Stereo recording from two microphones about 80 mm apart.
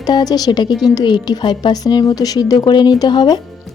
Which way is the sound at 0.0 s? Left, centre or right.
Left.